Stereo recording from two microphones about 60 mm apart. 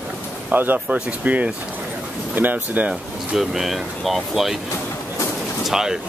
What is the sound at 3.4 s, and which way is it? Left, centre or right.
Speech, centre.